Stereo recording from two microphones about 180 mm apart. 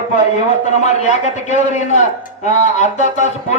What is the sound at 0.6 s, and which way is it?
Speech, 40° left (ahead or behind).